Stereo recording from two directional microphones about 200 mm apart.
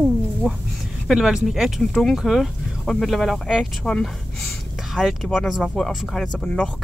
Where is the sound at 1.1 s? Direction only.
5° right (ahead or behind).